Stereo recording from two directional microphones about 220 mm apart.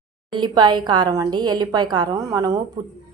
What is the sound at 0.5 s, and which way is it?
A woman's voice, 20° right (ahead or behind).